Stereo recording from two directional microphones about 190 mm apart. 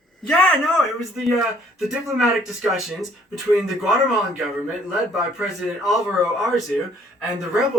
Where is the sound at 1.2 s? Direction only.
Centre (ahead or behind).